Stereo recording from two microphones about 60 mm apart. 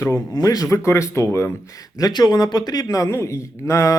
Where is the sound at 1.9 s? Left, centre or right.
Left.